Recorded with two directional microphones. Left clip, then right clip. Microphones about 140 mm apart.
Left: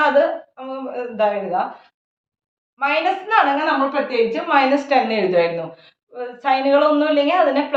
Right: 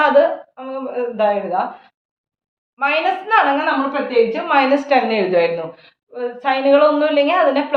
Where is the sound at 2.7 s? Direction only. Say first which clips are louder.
Right 1 dB; 30° right (ahead or behind).